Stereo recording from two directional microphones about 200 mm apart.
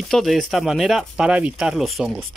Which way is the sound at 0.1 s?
Centre (ahead or behind).